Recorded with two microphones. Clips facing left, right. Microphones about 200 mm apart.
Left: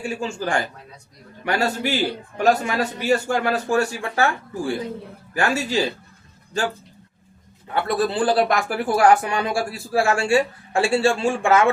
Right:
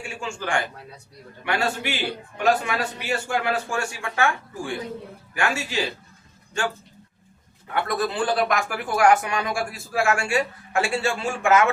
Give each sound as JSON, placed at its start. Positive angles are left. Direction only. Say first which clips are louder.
{"t": 0.0, "sound": "speech", "louder": "left 6 dB", "side_deg": 35}
{"t": 7.7, "sound": "speech", "louder": "left 3 dB", "side_deg": 30}